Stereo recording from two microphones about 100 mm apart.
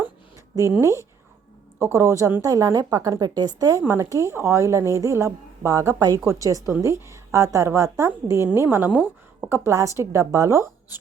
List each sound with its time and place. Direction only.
0.7 s a woman's voice: 30° right (ahead or behind)
9.5 s a woman's voice: 30° right (ahead or behind)